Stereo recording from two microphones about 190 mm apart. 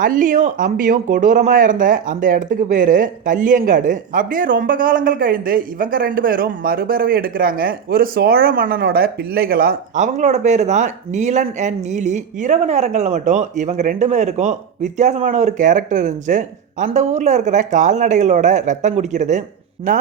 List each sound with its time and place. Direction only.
0.0 s speech: 45° right (ahead or behind)